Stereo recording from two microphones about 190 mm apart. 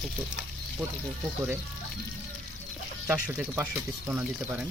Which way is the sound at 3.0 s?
10° right (ahead or behind).